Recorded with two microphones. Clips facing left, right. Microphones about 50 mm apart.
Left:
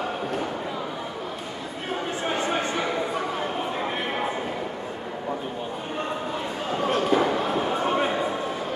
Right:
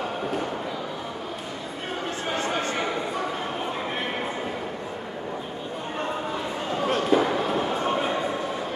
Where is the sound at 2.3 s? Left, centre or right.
Centre.